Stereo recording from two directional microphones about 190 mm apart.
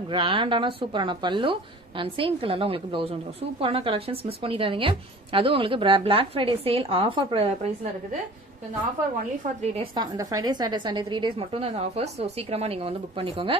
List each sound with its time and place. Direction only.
0.1 s a woman's voice: 25° right (ahead or behind)
9.9 s a woman's voice: 20° right (ahead or behind)